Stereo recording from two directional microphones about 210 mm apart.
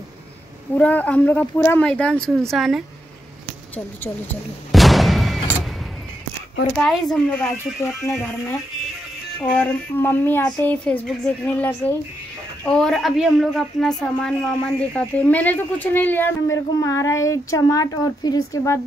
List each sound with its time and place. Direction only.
0.7 s speech: 5° left (ahead or behind)
3.7 s artillery fire: 10° left (ahead or behind)
6.8 s speech: centre (ahead or behind)